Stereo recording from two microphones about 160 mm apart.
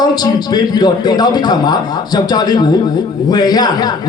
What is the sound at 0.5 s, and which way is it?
Speech, 25° left (ahead or behind).